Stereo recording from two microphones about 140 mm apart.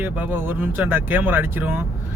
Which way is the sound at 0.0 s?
15° right (ahead or behind).